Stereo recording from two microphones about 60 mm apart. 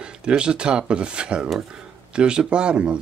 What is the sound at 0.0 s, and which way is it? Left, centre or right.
Speech, centre.